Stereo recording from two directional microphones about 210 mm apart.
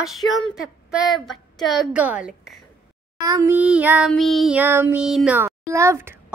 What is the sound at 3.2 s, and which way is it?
Child singing, 15° right (ahead or behind).